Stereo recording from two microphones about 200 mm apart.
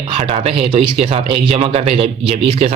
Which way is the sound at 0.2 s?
30° right (ahead or behind).